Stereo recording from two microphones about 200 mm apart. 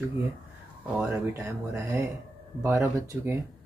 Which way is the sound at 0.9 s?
10° right (ahead or behind).